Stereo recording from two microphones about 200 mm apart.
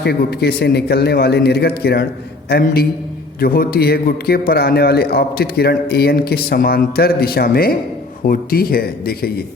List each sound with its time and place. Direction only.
0.0 s a man's voice: 55° left (ahead or behind)